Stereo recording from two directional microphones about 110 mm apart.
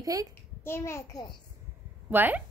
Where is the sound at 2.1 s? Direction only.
15° right (ahead or behind).